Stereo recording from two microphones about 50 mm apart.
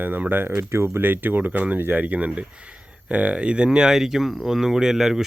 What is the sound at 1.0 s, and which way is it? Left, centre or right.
Speech, right.